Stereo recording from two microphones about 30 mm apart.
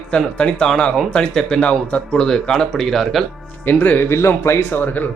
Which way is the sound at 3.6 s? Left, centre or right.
Left.